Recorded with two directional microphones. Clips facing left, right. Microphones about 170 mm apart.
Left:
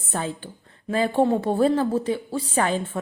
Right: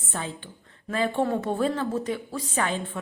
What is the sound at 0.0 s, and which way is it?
A woman's voice, 40° left (ahead or behind).